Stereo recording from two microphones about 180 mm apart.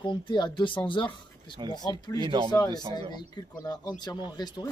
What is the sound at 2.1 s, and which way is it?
Speech, 25° right (ahead or behind).